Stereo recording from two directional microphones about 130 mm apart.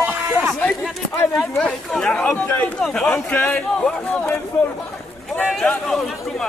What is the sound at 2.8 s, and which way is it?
Speech, 5° left (ahead or behind).